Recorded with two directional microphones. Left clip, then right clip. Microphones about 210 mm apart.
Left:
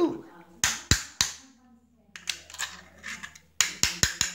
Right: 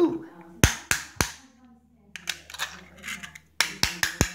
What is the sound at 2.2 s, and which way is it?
Computer keyboard, 25° right (ahead or behind).